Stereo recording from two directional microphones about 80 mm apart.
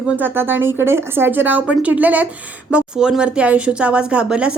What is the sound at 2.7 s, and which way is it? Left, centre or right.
Speech, centre.